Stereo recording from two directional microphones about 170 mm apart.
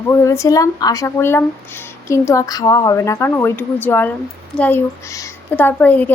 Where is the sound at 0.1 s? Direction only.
15° left (ahead or behind).